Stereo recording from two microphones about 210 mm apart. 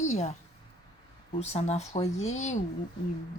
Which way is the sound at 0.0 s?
35° left (ahead or behind).